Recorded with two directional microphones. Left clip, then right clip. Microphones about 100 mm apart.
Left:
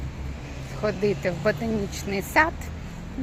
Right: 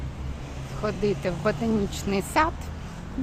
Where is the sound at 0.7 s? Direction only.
10° right (ahead or behind).